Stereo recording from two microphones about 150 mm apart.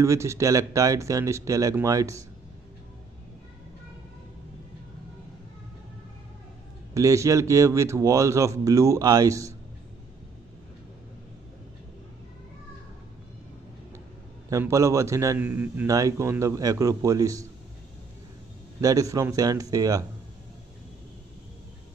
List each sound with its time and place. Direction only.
0.0 s speech: 20° right (ahead or behind)
6.9 s speech: 20° right (ahead or behind)
14.5 s speech: 20° right (ahead or behind)
18.8 s speech: 25° right (ahead or behind)